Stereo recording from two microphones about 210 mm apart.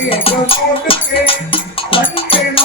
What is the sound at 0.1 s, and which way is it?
Music, 25° left (ahead or behind).